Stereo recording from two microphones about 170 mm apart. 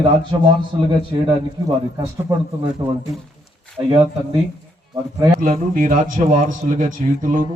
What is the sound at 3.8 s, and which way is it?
Speech, 20° right (ahead or behind).